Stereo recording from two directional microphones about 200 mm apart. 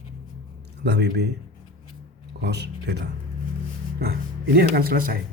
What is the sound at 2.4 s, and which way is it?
Speech, 55° right (ahead or behind).